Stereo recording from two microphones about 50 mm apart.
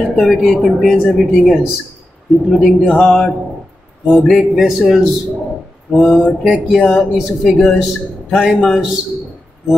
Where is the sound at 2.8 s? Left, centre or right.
Centre.